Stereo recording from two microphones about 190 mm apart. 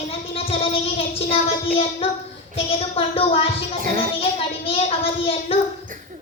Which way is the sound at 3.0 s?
30° left (ahead or behind).